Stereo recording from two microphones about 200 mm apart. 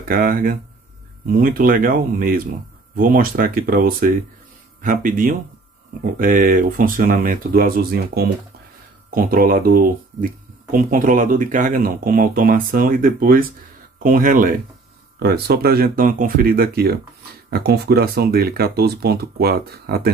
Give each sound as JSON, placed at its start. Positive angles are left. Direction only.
{"t": 0.1, "sound": "speech", "side_deg": -45}
{"t": 15.1, "sound": "speech", "side_deg": -50}